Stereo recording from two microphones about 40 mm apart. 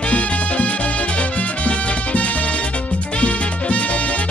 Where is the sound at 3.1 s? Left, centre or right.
Left.